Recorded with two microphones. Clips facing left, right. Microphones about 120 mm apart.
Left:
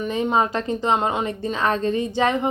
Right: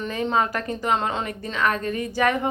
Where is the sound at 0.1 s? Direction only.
20° left (ahead or behind).